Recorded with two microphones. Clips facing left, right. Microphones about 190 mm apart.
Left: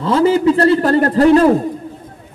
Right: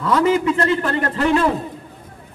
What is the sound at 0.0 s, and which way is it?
A man's voice, 30° left (ahead or behind).